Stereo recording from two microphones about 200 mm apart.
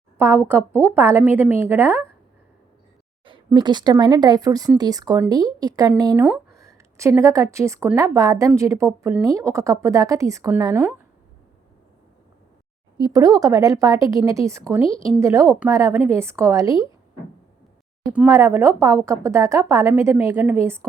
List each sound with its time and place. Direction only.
0.2 s a woman's voice: 10° right (ahead or behind)
3.2 s a woman's voice: 25° right (ahead or behind)
13.0 s a woman's voice: 20° right (ahead or behind)
18.1 s a woman's voice: 10° right (ahead or behind)